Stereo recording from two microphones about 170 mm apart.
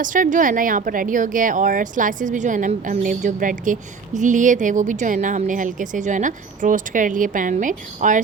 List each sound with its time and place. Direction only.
0.0 s speech: 50° right (ahead or behind)